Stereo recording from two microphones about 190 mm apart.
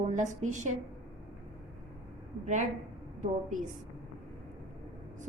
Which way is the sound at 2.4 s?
40° right (ahead or behind).